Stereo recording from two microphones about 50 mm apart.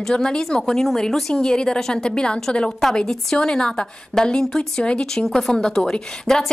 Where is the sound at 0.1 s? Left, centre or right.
Centre.